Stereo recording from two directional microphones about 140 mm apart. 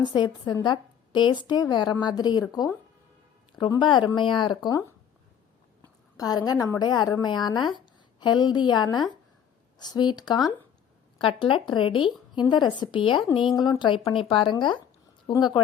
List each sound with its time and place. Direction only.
0.0 s speech: 30° left (ahead or behind)
3.5 s speech: 35° left (ahead or behind)
6.1 s a woman's voice: 25° left (ahead or behind)